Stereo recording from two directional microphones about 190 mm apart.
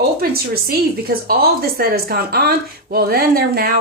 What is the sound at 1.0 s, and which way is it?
Speech, 55° right (ahead or behind).